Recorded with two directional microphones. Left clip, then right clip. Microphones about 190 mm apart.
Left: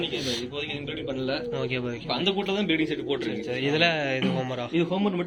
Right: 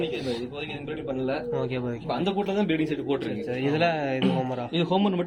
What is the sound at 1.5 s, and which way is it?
Mantra, 20° right (ahead or behind).